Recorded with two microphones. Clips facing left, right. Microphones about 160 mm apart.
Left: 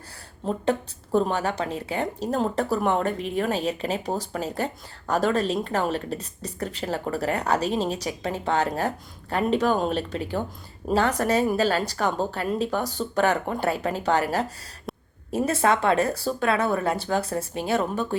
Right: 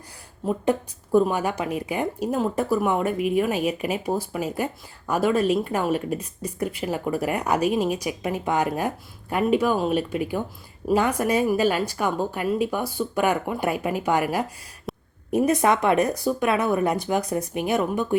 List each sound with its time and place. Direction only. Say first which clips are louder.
0.6 s speech: even; 10° right (ahead or behind)
14.9 s a sound: right 2 dB; centre (ahead or behind)
15.3 s speech: right 2 dB; 15° right (ahead or behind)